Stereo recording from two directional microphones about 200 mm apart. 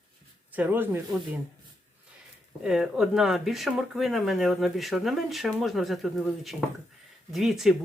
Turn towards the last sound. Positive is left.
turn(degrees=0)  # may be behind; listen again after turning